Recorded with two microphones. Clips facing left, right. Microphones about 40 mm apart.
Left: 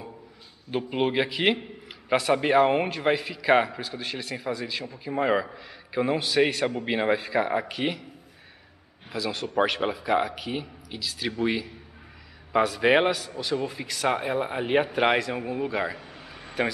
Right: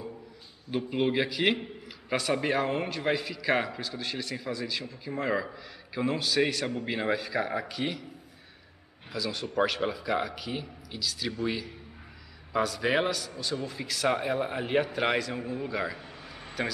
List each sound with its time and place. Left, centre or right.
0.7 s a man's voice: left
9.1 s a man's voice: centre